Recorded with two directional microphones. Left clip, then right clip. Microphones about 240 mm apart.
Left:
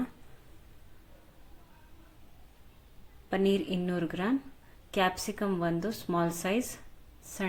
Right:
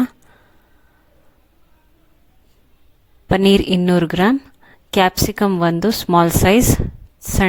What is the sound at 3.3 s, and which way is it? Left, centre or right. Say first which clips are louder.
A woman's voice: right 15 dB; right.